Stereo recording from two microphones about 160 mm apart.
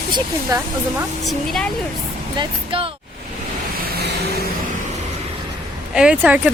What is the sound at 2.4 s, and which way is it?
Speech, 35° right (ahead or behind).